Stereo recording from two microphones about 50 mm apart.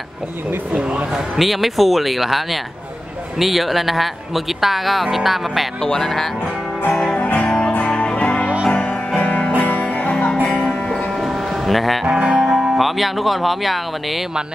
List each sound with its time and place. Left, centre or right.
0.7 s speech: right
1.3 s speech: centre
5.8 s speech: centre
6.9 s music: centre
7.2 s music: left
11.1 s music: centre
12.1 s speech: centre